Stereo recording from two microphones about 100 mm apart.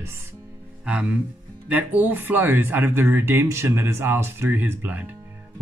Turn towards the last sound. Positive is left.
turn(degrees=-15)  # may be behind; listen again after turning